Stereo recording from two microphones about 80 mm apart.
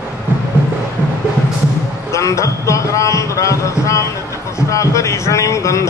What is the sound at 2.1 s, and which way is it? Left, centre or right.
A man's voice, left.